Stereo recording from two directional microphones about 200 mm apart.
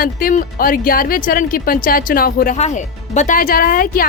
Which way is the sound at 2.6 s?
35° left (ahead or behind).